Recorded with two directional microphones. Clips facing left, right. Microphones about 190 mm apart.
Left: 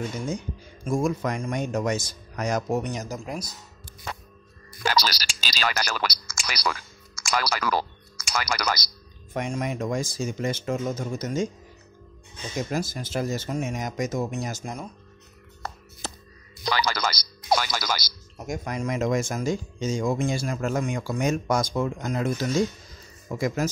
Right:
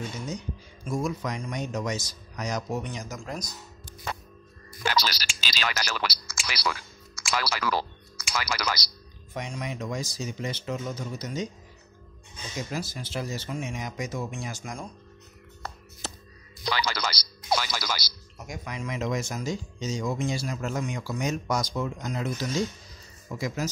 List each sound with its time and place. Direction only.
0.8 s speech: 50° left (ahead or behind)
3.2 s speech: 10° left (ahead or behind)
4.8 s a sound: 40° left (ahead or behind)
5.8 s speech: 50° left (ahead or behind)
12.6 s speech: 45° left (ahead or behind)
16.6 s speech: 45° left (ahead or behind)